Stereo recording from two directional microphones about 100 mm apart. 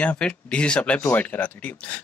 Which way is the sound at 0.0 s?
10° left (ahead or behind).